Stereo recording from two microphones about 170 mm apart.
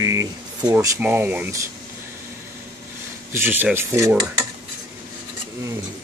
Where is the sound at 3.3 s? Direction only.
15° right (ahead or behind).